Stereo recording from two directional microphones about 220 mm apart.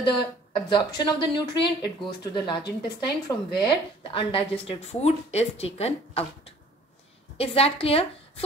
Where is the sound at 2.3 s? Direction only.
20° left (ahead or behind).